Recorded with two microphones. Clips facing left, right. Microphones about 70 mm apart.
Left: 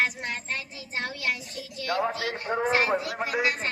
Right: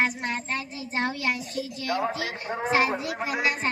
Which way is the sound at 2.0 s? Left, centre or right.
Centre.